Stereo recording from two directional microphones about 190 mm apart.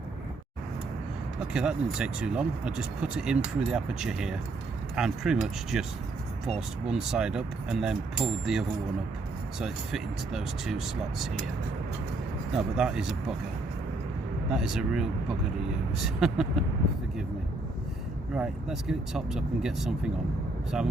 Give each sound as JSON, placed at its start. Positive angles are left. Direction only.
{"t": 1.5, "sound": "speech", "side_deg": -5}
{"t": 6.8, "sound": "speech", "side_deg": -5}
{"t": 12.7, "sound": "speech", "side_deg": -5}
{"t": 14.5, "sound": "speech", "side_deg": -5}
{"t": 18.3, "sound": "speech", "side_deg": -5}